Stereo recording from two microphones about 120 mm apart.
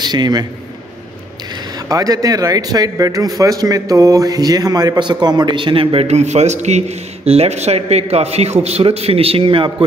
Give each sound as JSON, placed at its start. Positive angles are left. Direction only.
{"t": 0.0, "sound": "a man's voice", "side_deg": -35}
{"t": 1.9, "sound": "speech", "side_deg": -30}